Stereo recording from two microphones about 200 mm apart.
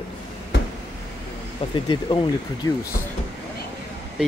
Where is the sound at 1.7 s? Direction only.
25° left (ahead or behind).